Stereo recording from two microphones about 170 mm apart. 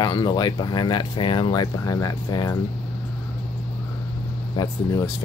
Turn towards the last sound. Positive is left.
turn(degrees=20)  # may be behind; listen again after turning